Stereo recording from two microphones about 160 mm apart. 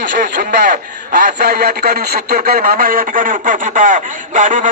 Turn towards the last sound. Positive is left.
turn(degrees=-55)  # may be behind; listen again after turning